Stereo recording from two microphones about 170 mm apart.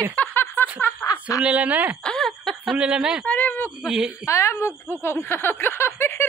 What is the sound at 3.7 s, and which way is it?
Speech, 5° right (ahead or behind).